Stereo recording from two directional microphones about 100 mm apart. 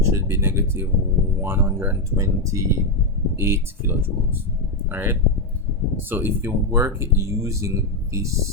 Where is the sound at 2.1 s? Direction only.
30° right (ahead or behind).